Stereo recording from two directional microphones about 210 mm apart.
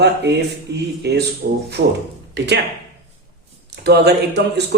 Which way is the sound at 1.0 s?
50° right (ahead or behind).